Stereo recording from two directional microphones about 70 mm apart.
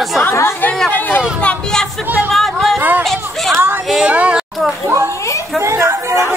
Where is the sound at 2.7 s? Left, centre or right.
Right.